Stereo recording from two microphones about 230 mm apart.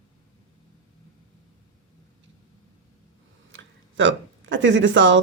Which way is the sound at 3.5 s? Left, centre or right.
Right.